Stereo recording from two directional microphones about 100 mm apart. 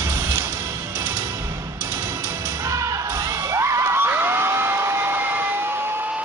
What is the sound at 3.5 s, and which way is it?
Crowd, 30° right (ahead or behind).